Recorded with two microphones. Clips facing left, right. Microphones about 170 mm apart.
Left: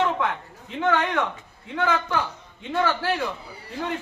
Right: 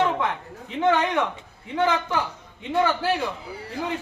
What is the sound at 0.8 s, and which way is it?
A man's voice, 15° right (ahead or behind).